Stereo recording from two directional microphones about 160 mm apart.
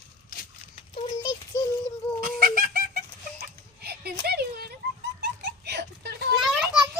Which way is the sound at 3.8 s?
85° right.